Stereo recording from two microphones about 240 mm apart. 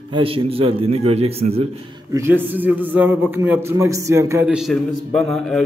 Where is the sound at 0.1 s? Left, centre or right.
Right.